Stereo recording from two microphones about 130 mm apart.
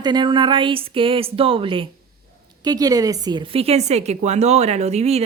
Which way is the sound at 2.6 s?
30° right (ahead or behind).